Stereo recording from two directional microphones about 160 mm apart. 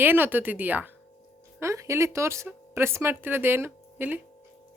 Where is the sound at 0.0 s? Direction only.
10° right (ahead or behind).